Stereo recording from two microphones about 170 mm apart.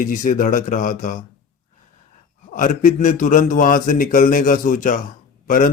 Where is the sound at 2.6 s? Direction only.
50° left (ahead or behind).